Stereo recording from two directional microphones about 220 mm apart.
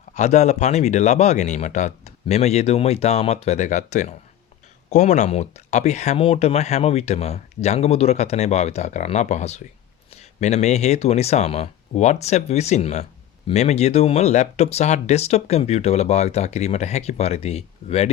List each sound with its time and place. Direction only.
0.1 s speech: 30° left (ahead or behind)